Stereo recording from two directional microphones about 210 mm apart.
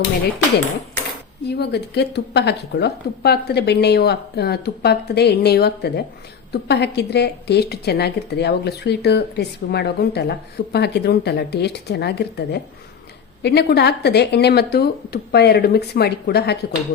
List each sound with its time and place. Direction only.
1.5 s speech: 50° left (ahead or behind)